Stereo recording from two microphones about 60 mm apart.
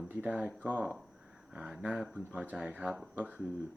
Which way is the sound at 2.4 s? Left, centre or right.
Right.